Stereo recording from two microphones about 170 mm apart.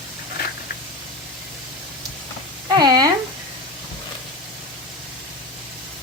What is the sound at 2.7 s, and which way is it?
Frying, 25° right (ahead or behind).